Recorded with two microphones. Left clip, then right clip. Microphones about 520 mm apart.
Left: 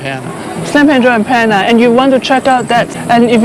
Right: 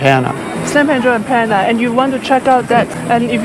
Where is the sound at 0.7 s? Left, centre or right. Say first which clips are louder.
Left 4 dB; left.